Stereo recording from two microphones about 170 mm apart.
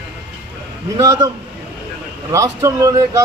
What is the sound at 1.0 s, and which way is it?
Speech, 20° right (ahead or behind).